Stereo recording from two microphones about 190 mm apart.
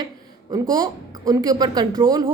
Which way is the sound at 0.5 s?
20° right (ahead or behind).